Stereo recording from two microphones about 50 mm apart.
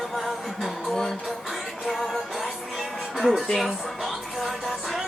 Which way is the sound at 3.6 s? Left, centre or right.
Centre.